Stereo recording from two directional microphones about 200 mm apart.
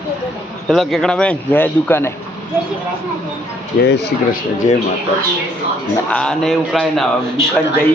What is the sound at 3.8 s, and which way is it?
Speech, 55° left (ahead or behind).